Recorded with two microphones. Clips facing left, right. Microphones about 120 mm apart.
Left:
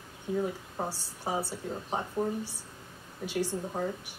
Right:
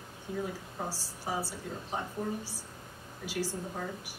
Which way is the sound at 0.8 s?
35° left (ahead or behind).